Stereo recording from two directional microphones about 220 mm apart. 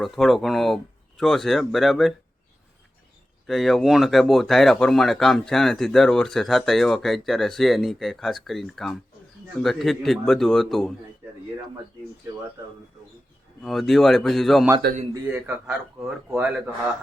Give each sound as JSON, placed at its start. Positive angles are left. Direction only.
{"t": 0.0, "sound": "speech", "side_deg": 0}
{"t": 3.4, "sound": "speech", "side_deg": 0}
{"t": 13.6, "sound": "a man's voice", "side_deg": 0}